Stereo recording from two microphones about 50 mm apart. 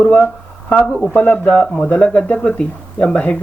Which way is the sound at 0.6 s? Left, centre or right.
Left.